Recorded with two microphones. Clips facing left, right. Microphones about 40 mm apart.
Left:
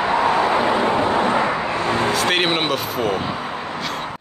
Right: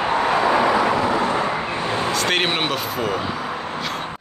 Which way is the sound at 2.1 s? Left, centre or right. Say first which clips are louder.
Even; centre.